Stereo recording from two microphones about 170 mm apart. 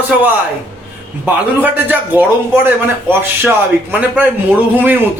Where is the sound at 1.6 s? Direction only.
10° right (ahead or behind).